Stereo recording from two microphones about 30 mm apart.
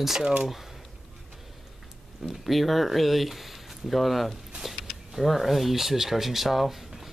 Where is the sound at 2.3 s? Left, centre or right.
Centre.